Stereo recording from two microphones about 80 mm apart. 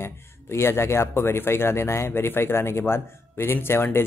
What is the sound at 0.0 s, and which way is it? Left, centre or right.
Speech, left.